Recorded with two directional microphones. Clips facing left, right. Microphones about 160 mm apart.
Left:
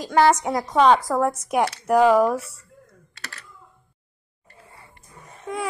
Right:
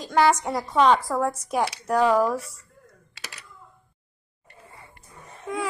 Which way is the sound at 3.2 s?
15° right (ahead or behind).